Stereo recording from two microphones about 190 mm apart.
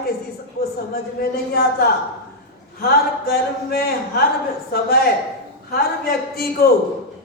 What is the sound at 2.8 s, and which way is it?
Speech, 55° left (ahead or behind).